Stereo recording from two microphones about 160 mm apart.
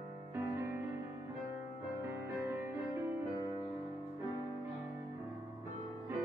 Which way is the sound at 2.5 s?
10° right (ahead or behind).